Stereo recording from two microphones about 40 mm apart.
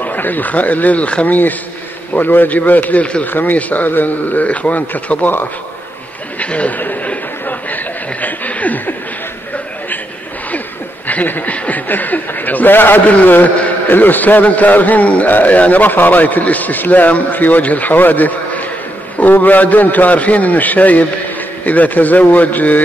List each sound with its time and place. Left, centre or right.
0.0 s speech: left
1.2 s a man's voice: left
3.3 s a man's voice: left
6.4 s speech: left
7.4 s chuckle: left
11.1 s speech: left
11.9 s a man's voice: left
13.0 s a man's voice: left